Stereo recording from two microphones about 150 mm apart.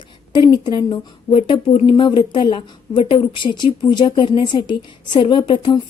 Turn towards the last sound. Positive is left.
turn(degrees=30)  # may be behind; listen again after turning